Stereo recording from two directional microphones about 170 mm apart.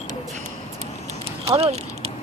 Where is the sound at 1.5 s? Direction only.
35° right (ahead or behind).